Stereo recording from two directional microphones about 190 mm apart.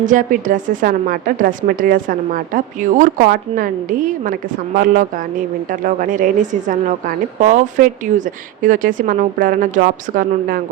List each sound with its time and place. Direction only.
0.0 s a woman's voice: 40° right (ahead or behind)